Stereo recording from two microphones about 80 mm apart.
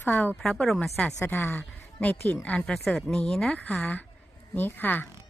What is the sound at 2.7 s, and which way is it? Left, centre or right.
Speech, centre.